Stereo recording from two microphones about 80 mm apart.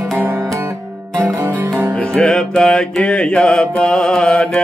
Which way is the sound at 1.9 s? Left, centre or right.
Centre.